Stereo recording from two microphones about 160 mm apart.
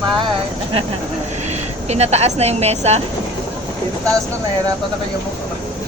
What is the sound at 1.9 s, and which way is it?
A woman's voice, 40° right (ahead or behind).